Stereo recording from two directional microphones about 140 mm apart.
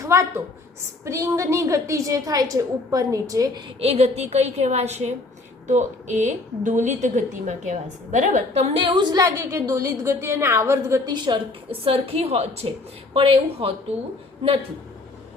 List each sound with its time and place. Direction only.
0.0 s a woman's voice: 20° right (ahead or behind)
3.8 s a woman's voice: 45° right (ahead or behind); by 8.6 s 65° right (ahead or behind)
8.7 s a woman's voice: 35° right (ahead or behind); by 11.1 s 20° right (ahead or behind)
11.1 s a woman's voice: 35° right (ahead or behind)